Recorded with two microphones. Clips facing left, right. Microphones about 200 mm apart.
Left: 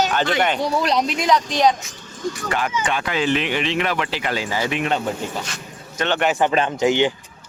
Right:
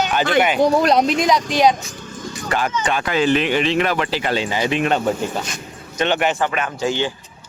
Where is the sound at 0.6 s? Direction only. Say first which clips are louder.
Right 5 dB; 50° right (ahead or behind).